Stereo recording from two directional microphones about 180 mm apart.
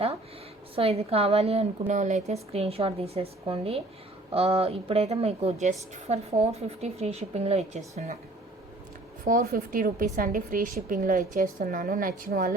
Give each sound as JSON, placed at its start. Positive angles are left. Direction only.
{"t": 0.8, "sound": "a woman's voice", "side_deg": -35}
{"t": 9.2, "sound": "a woman's voice", "side_deg": -55}